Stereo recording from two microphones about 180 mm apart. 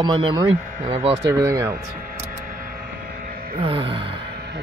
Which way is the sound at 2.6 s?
55° right (ahead or behind).